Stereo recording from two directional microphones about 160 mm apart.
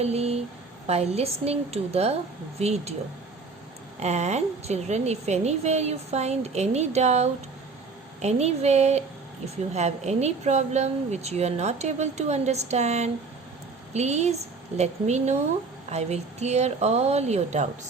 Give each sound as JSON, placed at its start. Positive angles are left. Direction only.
{"t": 0.0, "sound": "a woman's voice", "side_deg": -40}
{"t": 4.0, "sound": "a woman's voice", "side_deg": -45}